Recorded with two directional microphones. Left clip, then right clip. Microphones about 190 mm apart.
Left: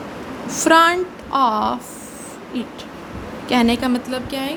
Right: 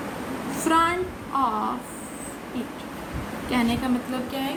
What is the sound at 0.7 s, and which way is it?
A woman's voice, 60° left (ahead or behind).